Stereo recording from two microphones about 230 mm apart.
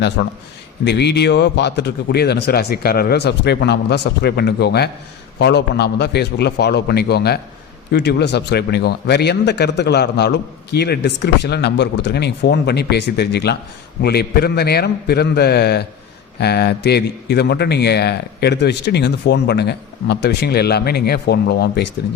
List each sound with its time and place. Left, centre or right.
0.2 s speech: left